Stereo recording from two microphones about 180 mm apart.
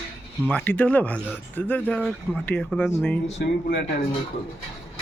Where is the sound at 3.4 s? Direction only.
65° left (ahead or behind).